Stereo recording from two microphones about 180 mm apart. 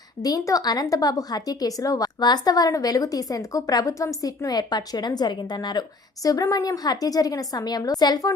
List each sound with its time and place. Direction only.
0.2 s a woman's voice: 20° left (ahead or behind)